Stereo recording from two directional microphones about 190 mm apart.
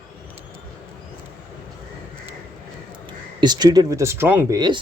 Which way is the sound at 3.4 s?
20° right (ahead or behind).